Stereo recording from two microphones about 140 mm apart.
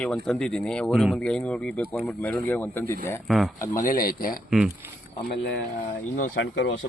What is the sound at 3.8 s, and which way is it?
Speech, 90° left.